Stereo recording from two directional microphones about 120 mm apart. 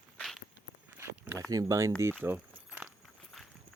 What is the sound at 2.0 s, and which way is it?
Keys jangling, 15° right (ahead or behind).